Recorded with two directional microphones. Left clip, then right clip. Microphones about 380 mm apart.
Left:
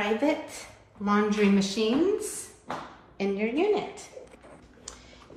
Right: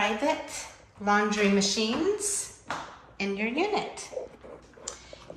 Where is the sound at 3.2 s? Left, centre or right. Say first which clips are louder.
Left 1 dB; centre.